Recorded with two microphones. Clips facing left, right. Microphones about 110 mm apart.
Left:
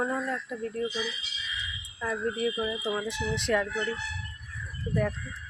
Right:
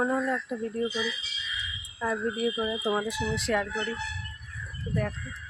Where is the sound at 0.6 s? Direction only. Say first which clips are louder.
Right 1 dB; 10° right (ahead or behind).